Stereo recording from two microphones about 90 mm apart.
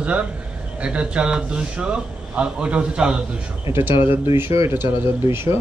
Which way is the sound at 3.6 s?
30° right (ahead or behind).